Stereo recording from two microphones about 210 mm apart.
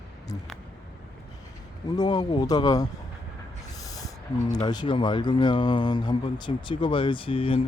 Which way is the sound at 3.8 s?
15° left (ahead or behind).